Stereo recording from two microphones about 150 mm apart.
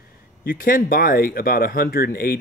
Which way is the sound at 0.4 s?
70° left (ahead or behind).